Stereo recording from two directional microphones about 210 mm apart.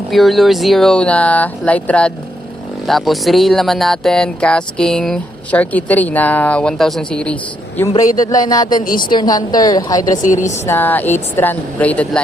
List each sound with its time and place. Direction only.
0.1 s speech: centre (ahead or behind)
7.8 s a woman's voice: 15° left (ahead or behind)
8.8 s a woman's voice: 40° left (ahead or behind)
9.0 s a woman's voice: 20° left (ahead or behind)